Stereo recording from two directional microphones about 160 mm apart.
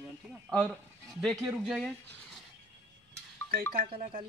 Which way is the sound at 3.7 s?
70° right (ahead or behind).